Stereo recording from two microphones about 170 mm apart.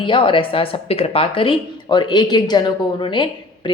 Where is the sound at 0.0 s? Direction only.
30° left (ahead or behind).